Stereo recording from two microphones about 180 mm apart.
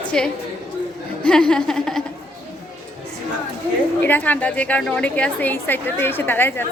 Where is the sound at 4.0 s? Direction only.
10° left (ahead or behind).